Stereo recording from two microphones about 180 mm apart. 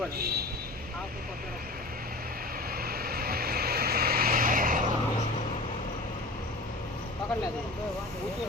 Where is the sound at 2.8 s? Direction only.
55° right (ahead or behind).